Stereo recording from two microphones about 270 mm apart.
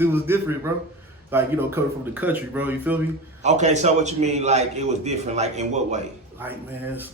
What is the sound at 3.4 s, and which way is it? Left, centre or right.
A man's voice, right.